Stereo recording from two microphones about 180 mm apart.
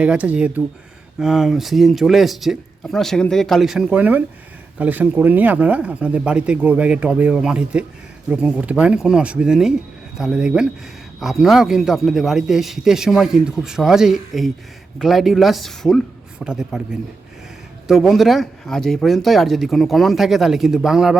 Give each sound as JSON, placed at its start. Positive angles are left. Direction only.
{"t": 0.0, "sound": "a man's voice", "side_deg": -5}